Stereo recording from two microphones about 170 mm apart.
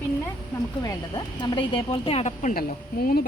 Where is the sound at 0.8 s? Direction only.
25° left (ahead or behind).